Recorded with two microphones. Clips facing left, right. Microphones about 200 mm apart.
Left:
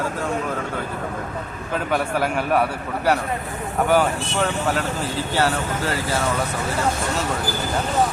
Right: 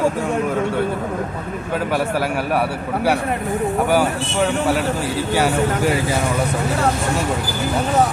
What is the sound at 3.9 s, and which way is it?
Speech, 10° right (ahead or behind).